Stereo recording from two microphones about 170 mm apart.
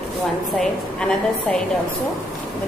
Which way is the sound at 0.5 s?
5° left (ahead or behind).